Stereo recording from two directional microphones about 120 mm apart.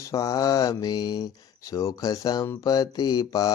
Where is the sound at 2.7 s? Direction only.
35° left (ahead or behind).